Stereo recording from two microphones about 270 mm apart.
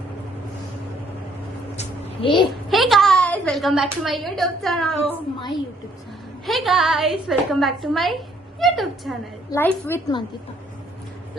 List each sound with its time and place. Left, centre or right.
1.7 s a sound: left
2.6 s a woman's voice: centre
6.4 s a woman's voice: centre